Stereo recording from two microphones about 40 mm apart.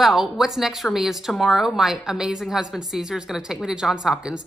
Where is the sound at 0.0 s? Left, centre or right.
Centre.